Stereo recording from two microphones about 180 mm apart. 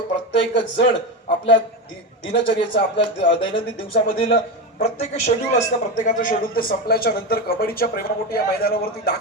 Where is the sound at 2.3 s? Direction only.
75° left (ahead or behind).